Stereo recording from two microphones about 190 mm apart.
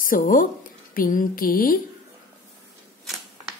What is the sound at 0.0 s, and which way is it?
A woman's voice, 45° left (ahead or behind).